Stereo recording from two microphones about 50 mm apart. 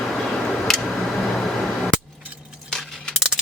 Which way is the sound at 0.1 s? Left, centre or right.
Centre.